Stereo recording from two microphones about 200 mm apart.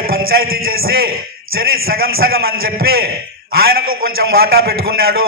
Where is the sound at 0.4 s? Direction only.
50° right (ahead or behind).